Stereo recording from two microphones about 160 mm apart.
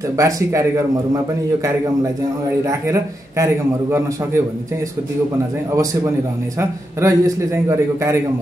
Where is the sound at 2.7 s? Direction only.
20° right (ahead or behind).